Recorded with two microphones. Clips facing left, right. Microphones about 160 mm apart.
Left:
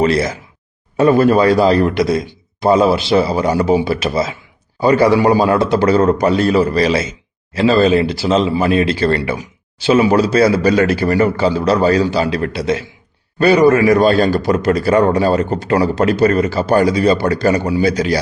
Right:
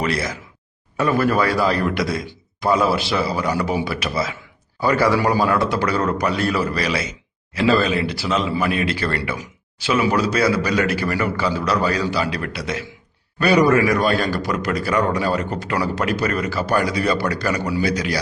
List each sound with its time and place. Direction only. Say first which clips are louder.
0.0 s a man's voice: left 8 dB; 25° left (ahead or behind)